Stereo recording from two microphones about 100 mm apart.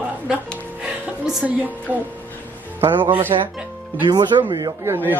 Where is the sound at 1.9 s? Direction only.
15° right (ahead or behind).